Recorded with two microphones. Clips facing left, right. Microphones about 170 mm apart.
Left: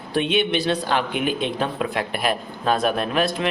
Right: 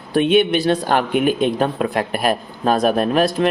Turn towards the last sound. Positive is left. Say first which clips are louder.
# right 6 dB
turn(degrees=-45)  # may be behind; listen again after turning